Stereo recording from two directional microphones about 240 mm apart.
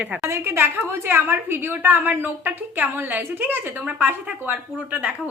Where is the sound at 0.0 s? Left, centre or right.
Centre.